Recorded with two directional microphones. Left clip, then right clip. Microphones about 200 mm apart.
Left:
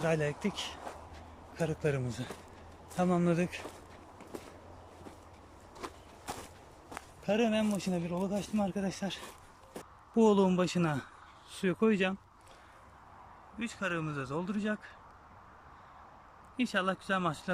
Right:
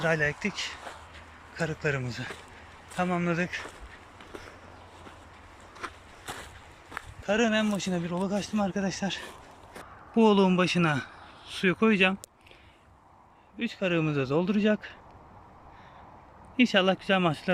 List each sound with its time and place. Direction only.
0.0 s speech: 15° left (ahead or behind)
5.8 s walk: 20° left (ahead or behind)
6.9 s speech: 5° left (ahead or behind)
13.6 s speech: 15° right (ahead or behind)
16.6 s speech: 15° right (ahead or behind)